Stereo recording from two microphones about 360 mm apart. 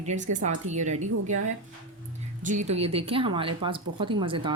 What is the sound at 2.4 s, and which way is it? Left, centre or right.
Speech, centre.